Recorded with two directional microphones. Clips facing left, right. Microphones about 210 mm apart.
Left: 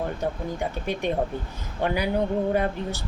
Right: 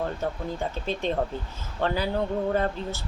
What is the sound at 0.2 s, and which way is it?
A woman's voice, 15° left (ahead or behind).